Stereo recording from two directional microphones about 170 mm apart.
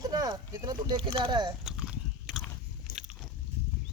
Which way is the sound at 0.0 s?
20° right (ahead or behind).